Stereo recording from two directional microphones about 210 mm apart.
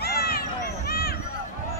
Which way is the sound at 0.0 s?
45° left (ahead or behind).